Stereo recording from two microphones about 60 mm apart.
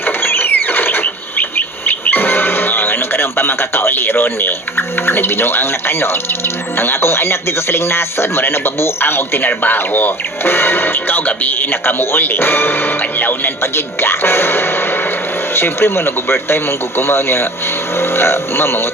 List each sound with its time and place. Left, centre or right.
0.2 s mechanisms: left
1.0 s music: left
6.7 s speech: left